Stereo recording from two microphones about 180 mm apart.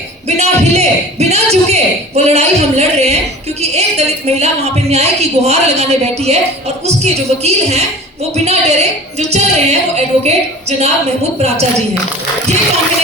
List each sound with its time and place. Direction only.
0.3 s a man's voice: 35° right (ahead or behind)